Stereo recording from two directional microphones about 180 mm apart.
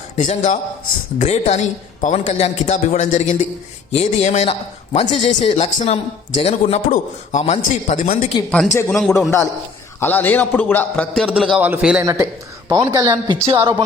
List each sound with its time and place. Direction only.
0.2 s a man's voice: 45° left (ahead or behind)
8.4 s a man's voice: centre (ahead or behind)
11.3 s a man's voice: 5° right (ahead or behind)
12.0 s speech: 20° right (ahead or behind)